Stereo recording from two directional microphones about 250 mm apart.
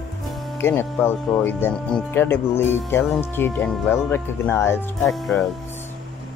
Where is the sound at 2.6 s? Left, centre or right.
Left.